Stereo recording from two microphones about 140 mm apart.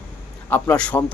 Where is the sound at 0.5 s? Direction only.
10° left (ahead or behind).